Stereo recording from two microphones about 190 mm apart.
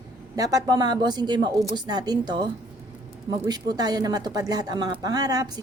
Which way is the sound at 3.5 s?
20° right (ahead or behind).